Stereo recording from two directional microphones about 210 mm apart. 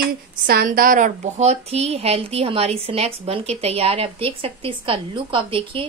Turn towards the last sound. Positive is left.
turn(degrees=-25)  # may be behind; listen again after turning